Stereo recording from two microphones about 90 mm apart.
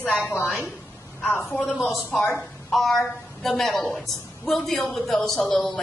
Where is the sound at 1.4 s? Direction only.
5° left (ahead or behind).